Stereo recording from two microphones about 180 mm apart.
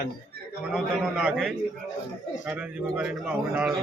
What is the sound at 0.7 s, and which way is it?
A man's voice, centre (ahead or behind).